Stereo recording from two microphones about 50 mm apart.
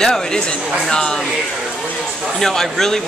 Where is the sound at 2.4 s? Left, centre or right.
Centre.